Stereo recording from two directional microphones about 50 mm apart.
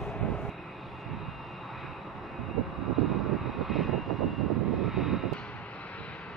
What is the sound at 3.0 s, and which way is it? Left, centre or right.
Vehicle, centre.